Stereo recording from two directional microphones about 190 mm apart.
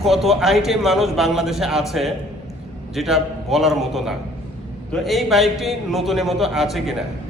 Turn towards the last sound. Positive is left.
turn(degrees=0)  # may be behind; listen again after turning